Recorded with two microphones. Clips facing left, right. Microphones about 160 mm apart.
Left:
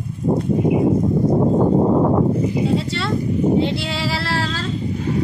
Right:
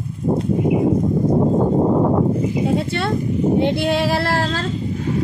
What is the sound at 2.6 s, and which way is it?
A woman's voice, 55° right (ahead or behind).